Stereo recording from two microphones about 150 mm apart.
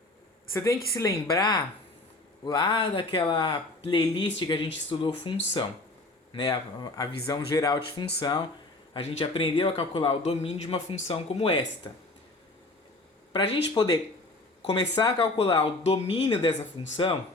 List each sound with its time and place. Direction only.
0.5 s speech: 20° left (ahead or behind)
9.0 s speech: 40° left (ahead or behind)
13.3 s speech: 30° left (ahead or behind)
14.6 s speech: 40° left (ahead or behind)